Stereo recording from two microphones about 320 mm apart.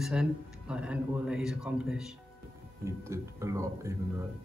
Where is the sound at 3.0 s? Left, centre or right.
Centre.